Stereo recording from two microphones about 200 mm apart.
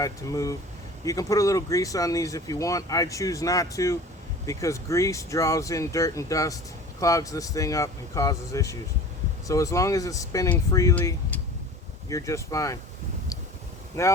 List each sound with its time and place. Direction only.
0.0 s speech: 15° left (ahead or behind)
14.0 s speech: 15° left (ahead or behind)